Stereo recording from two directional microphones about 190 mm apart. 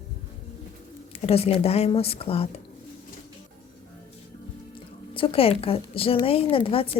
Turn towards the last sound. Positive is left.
turn(degrees=30)  # may be behind; listen again after turning